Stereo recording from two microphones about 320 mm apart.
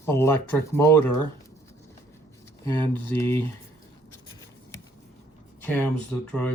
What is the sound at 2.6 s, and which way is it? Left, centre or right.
Speech, centre.